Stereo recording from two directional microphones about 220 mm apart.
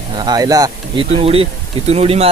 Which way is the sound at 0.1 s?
20° right (ahead or behind).